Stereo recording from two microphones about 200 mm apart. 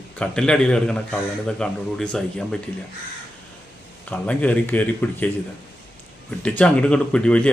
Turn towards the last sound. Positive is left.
turn(degrees=5)  # may be behind; listen again after turning